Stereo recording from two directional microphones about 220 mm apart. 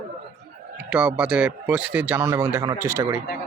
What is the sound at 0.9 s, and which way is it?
A man's voice, 5° right (ahead or behind).